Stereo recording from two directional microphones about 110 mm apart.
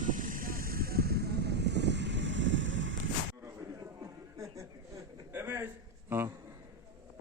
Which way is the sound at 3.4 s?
30° right (ahead or behind).